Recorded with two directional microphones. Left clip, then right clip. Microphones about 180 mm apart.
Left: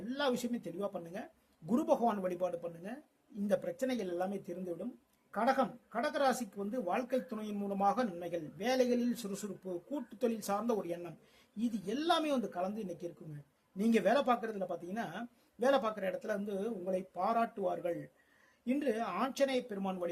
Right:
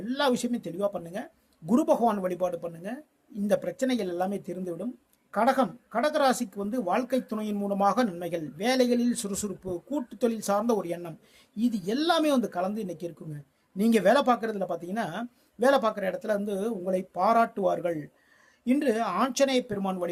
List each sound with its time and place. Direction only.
0.0 s speech: 25° right (ahead or behind)